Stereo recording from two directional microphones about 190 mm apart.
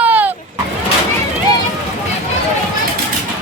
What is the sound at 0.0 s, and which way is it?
Vehicle, 10° right (ahead or behind).